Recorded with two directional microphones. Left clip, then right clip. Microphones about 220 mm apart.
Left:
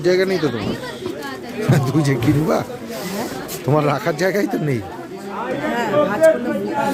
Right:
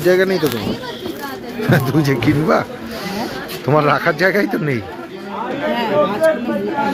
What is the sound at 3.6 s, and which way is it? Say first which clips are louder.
Speech: right 4 dB; 10° left (ahead or behind).